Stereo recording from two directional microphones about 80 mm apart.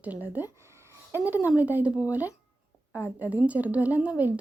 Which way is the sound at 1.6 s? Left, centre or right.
Right.